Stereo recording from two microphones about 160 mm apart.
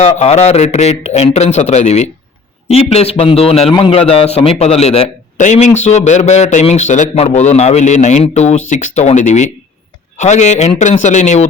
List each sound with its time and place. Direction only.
0.0 s a man's voice: 40° left (ahead or behind)